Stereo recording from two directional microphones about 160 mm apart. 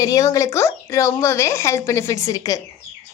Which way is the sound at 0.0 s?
20° left (ahead or behind).